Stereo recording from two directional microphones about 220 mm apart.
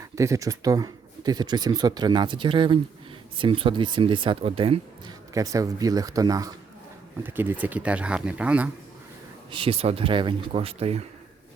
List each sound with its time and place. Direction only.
0.2 s speech: 15° right (ahead or behind)
9.5 s speech: 25° right (ahead or behind)